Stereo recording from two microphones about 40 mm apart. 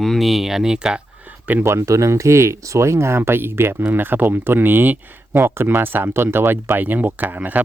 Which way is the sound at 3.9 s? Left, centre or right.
Right.